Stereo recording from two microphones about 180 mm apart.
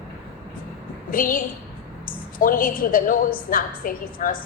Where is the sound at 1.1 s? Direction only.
50° left (ahead or behind).